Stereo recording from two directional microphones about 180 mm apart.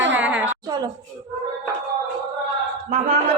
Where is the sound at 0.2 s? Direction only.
5° right (ahead or behind).